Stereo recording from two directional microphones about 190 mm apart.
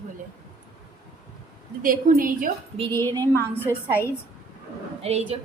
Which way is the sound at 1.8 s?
45° right (ahead or behind).